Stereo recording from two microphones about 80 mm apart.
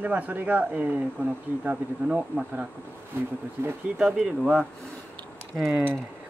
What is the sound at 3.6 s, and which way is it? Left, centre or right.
Speech, right.